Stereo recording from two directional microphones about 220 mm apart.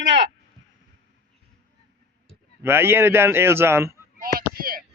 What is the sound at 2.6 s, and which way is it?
Speech, 10° right (ahead or behind).